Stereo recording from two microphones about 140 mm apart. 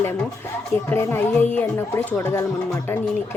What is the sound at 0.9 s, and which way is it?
Speech, 15° left (ahead or behind).